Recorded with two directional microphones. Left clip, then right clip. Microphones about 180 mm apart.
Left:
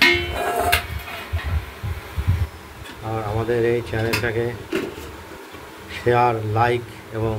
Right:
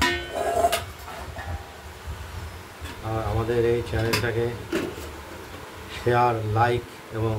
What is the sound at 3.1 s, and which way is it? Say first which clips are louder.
Speech: left 4 dB; 10° left (ahead or behind).